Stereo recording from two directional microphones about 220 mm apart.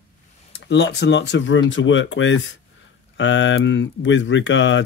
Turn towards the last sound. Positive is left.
turn(degrees=55)  # may be behind; listen again after turning